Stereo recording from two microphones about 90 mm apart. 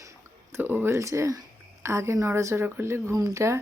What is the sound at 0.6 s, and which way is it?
Speech, 20° right (ahead or behind).